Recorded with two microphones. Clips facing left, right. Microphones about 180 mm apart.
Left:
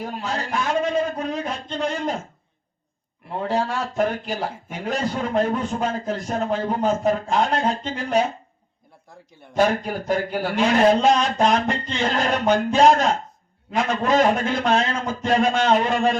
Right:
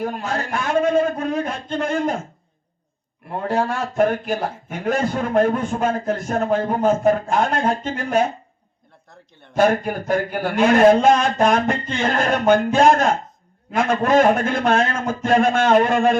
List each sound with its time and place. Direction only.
0.0 s a sound: 50° right (ahead or behind)
3.3 s a man's voice: 55° right (ahead or behind)
9.6 s a man's voice: 50° right (ahead or behind)